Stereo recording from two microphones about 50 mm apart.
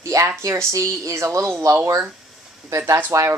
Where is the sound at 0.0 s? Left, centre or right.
Right.